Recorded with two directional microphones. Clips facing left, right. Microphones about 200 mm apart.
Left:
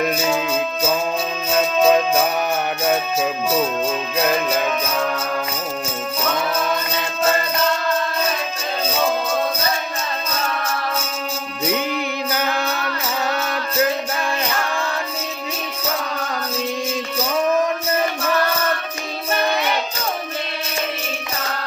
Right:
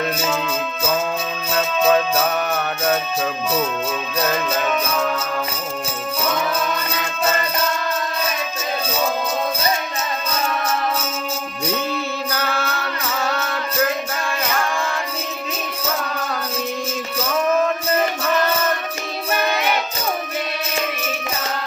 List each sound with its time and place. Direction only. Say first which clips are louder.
0.0 s music: left 2 dB; 15° left (ahead or behind)
1.5 s music: left 2 dB; 15° left (ahead or behind)
4.2 s music: left 2 dB; 15° left (ahead or behind)
11.7 s music: left 1 dB; 15° left (ahead or behind)